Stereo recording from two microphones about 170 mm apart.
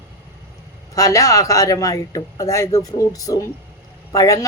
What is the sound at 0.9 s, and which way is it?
A man's voice, 20° left (ahead or behind).